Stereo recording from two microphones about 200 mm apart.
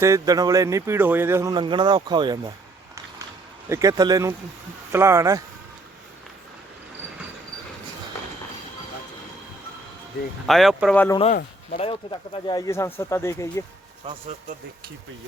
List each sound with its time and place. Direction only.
0.0 s speech: 15° right (ahead or behind)
3.7 s speech: 15° right (ahead or behind)
10.4 s speech: centre (ahead or behind)
11.7 s speech: 30° left (ahead or behind); by 13.7 s 15° left (ahead or behind)